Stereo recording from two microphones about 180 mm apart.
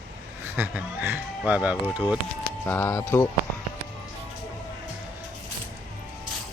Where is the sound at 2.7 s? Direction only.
15° left (ahead or behind).